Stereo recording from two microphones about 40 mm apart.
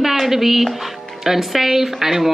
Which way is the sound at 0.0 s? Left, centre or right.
Centre.